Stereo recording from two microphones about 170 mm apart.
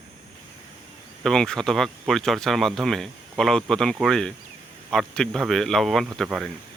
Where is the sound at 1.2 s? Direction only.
5° left (ahead or behind).